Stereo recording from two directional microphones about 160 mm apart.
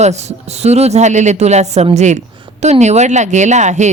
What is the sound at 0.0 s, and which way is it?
Speech, 45° right (ahead or behind).